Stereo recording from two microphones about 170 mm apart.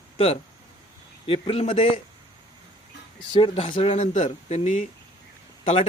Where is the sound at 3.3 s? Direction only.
30° left (ahead or behind).